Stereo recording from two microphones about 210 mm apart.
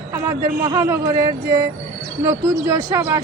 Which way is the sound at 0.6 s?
15° right (ahead or behind).